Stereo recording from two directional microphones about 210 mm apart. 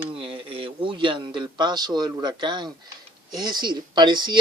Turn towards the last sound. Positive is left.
turn(degrees=-20)  # may be behind; listen again after turning